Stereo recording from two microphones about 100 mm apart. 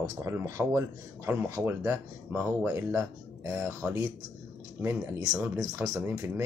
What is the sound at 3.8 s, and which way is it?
Speech, 15° right (ahead or behind).